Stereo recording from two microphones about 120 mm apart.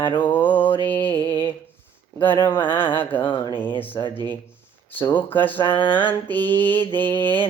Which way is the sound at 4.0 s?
40° left (ahead or behind).